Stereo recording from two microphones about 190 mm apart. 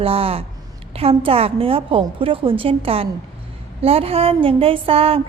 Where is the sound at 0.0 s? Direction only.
30° right (ahead or behind).